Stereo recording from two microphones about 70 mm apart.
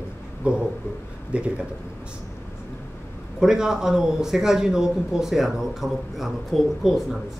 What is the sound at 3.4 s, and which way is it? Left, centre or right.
A man's voice, centre.